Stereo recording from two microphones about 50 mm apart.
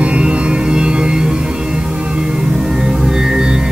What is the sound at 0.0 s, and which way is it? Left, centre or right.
Music, right.